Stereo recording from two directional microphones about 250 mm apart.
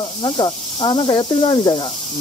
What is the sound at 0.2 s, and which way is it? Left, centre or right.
Speech, centre.